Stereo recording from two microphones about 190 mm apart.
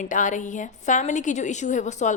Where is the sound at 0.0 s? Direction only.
40° left (ahead or behind).